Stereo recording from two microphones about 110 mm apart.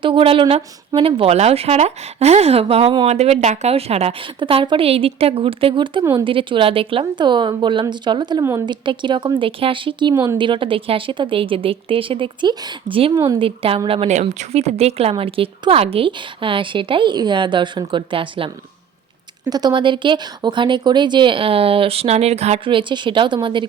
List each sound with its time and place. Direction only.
0.0 s a woman's voice: 55° right (ahead or behind); by 4.1 s 70° right (ahead or behind)
4.4 s a woman's voice: 50° right (ahead or behind)
13.4 s speech: 55° right (ahead or behind)
15.2 s a woman's voice: 60° right (ahead or behind)
19.5 s a woman's voice: 40° right (ahead or behind); by 22.6 s 75° right (ahead or behind)
22.6 s a woman's voice: 50° right (ahead or behind)